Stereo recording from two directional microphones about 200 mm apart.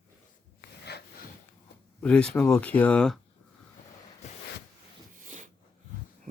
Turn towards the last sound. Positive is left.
turn(degrees=-40)  # may be behind; listen again after turning